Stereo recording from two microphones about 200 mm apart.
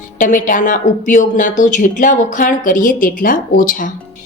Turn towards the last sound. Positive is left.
turn(degrees=45)  # may be behind; listen again after turning